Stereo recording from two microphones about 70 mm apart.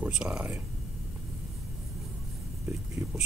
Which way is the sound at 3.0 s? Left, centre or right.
Right.